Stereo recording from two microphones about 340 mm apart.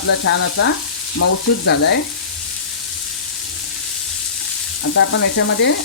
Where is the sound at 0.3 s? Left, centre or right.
Left.